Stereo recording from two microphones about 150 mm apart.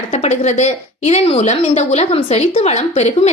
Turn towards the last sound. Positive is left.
turn(degrees=45)  # may be behind; listen again after turning